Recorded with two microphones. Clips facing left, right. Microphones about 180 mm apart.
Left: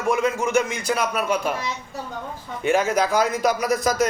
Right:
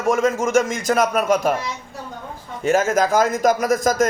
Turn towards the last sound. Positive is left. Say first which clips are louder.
# right 3 dB
turn(degrees=-45)  # may be behind; listen again after turning